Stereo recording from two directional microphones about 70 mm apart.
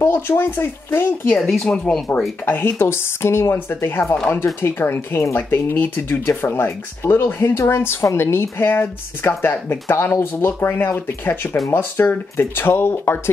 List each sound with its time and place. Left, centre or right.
0.0 s speech: left
1.3 s speech: centre
2.4 s speech: left